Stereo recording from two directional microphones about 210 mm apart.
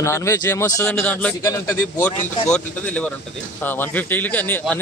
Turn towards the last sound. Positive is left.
turn(degrees=10)  # may be behind; listen again after turning